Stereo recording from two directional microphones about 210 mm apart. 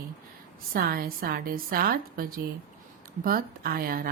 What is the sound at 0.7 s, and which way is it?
A woman's voice, 45° right (ahead or behind).